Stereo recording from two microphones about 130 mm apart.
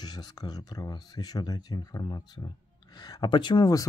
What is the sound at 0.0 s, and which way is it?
Speech, 30° left (ahead or behind).